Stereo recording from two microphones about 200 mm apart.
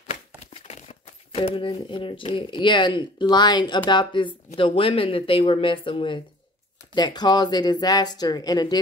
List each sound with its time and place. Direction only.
0.6 s speech: 30° left (ahead or behind)